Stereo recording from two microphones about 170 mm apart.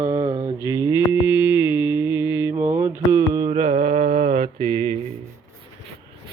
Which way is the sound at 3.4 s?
35° right (ahead or behind).